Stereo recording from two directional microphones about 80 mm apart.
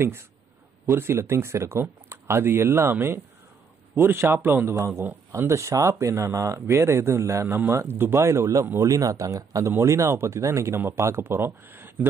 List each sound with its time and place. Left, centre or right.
0.8 s a man's voice: right